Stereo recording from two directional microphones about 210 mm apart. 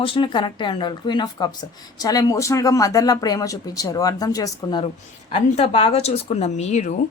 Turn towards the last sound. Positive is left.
turn(degrees=35)  # may be behind; listen again after turning